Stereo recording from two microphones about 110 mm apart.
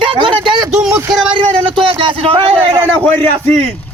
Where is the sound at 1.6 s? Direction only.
50° right (ahead or behind).